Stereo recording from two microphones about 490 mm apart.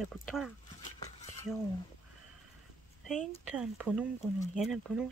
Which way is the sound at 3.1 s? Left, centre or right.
Centre.